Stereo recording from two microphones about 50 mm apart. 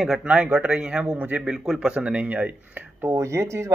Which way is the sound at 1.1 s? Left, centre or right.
Right.